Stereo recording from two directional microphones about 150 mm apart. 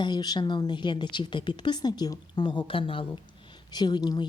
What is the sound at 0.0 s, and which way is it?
A woman's voice, 30° left (ahead or behind).